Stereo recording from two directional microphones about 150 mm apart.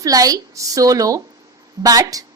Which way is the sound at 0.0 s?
25° right (ahead or behind).